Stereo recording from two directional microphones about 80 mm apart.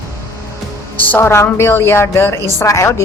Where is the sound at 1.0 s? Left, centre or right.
Left.